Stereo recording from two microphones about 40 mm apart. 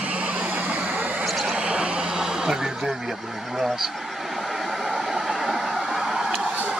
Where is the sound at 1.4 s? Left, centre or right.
Right.